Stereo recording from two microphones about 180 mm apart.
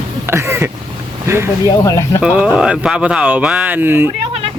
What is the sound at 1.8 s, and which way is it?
Speech, 15° left (ahead or behind).